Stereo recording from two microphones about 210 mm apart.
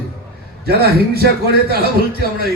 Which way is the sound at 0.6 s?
45° right (ahead or behind).